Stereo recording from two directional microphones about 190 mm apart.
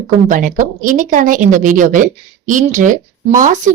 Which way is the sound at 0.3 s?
45° right (ahead or behind).